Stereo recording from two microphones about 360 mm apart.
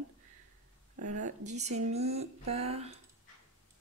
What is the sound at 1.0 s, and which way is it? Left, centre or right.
Speech, right.